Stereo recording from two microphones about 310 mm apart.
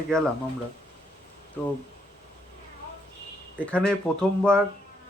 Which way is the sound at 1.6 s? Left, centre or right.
Centre.